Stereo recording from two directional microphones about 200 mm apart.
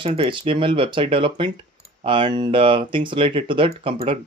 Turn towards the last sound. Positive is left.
turn(degrees=-30)  # may be behind; listen again after turning